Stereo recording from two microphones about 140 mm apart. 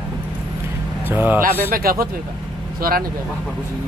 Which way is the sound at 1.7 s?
90° right.